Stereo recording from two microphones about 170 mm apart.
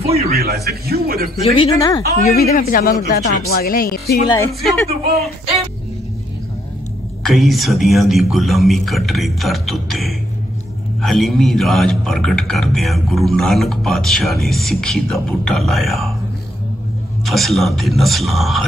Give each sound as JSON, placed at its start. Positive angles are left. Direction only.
{"t": 0.0, "sound": "speech", "side_deg": -35}
{"t": 0.3, "sound": "a man's voice", "side_deg": -65}
{"t": 1.4, "sound": "speech", "side_deg": 35}
{"t": 1.8, "sound": "a woman's voice", "side_deg": 25}
{"t": 2.2, "sound": "speech", "side_deg": 60}
{"t": 7.2, "sound": "a man's voice", "side_deg": 0}
{"t": 17.2, "sound": "a man's voice", "side_deg": 0}